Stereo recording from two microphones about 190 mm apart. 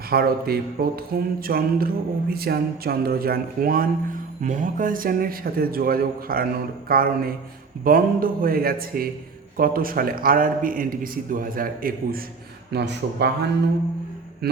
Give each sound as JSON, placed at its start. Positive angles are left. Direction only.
{"t": 0.1, "sound": "speech", "side_deg": -55}
{"t": 12.7, "sound": "a man's voice", "side_deg": -65}
{"t": 14.4, "sound": "mantra", "side_deg": -55}